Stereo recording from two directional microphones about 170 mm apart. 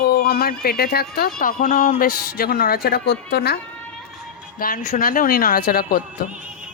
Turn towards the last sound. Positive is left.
turn(degrees=60)  # may be behind; listen again after turning